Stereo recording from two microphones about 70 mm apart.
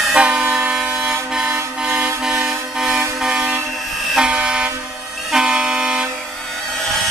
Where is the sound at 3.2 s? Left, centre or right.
Centre.